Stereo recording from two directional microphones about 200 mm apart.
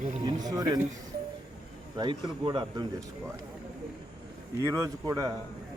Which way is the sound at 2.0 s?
25° right (ahead or behind).